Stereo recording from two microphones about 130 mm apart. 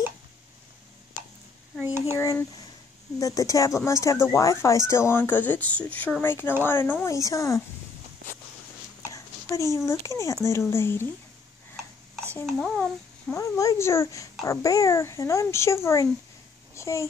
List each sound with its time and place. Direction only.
2.1 s speech: 20° left (ahead or behind)
9.0 s speech: 25° left (ahead or behind)
12.4 s a child's voice: 5° right (ahead or behind)
13.3 s a child's voice: 25° left (ahead or behind)